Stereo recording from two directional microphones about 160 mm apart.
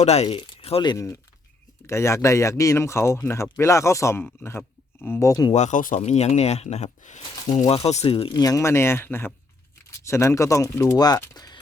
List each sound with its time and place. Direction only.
0.0 s speech: 40° left (ahead or behind); by 5.5 s 20° left (ahead or behind)
5.5 s speech: 50° left (ahead or behind)
6.0 s speech: 40° left (ahead or behind); by 11.6 s 25° left (ahead or behind)